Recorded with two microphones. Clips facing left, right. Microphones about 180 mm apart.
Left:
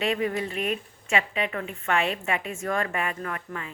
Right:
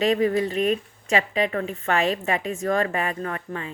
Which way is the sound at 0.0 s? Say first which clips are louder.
Right 6 dB; 35° right (ahead or behind).